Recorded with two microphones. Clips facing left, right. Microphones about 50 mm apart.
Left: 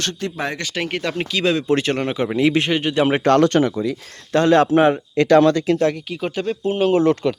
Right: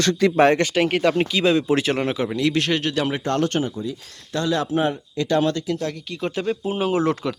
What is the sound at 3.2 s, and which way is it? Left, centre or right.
Speech, left.